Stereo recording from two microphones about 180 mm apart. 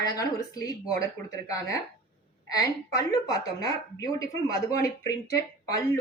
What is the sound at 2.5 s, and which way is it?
A woman's voice, 20° left (ahead or behind).